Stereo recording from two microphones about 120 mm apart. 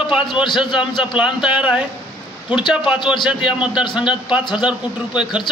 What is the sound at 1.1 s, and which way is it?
A man's voice, 5° right (ahead or behind).